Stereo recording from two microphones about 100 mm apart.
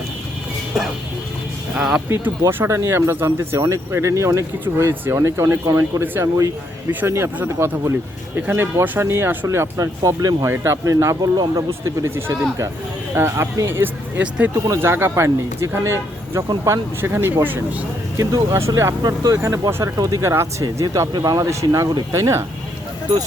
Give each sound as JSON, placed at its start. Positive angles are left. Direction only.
{"t": 1.7, "sound": "speech", "side_deg": -5}
{"t": 2.0, "sound": "speech", "side_deg": -25}
{"t": 12.0, "sound": "speech", "side_deg": -25}
{"t": 14.2, "sound": "speech", "side_deg": -10}
{"t": 14.5, "sound": "speech", "side_deg": -25}
{"t": 18.5, "sound": "speech", "side_deg": -30}
{"t": 20.8, "sound": "speech", "side_deg": -40}